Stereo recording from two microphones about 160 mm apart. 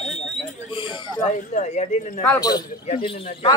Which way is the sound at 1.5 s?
45° left (ahead or behind).